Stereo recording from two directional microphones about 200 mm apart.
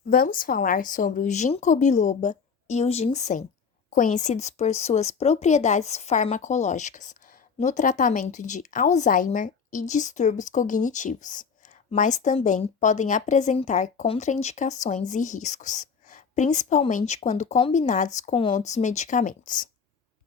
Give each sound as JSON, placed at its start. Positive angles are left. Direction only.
{"t": 0.1, "sound": "speech", "side_deg": 45}